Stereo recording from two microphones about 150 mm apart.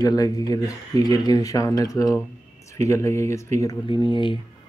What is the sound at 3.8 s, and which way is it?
Speech, 30° left (ahead or behind).